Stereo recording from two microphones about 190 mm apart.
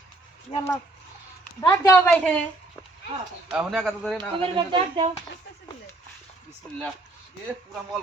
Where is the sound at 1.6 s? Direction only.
15° left (ahead or behind).